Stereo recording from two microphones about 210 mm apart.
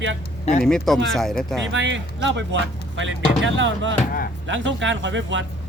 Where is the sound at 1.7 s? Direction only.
60° right (ahead or behind).